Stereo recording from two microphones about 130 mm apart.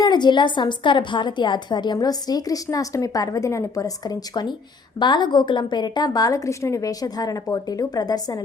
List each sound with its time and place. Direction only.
0.0 s a woman's voice: 35° left (ahead or behind)